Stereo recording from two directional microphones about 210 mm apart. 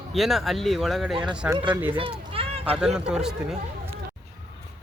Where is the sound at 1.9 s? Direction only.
25° right (ahead or behind).